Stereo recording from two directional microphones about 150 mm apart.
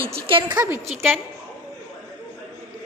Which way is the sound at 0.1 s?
35° right (ahead or behind).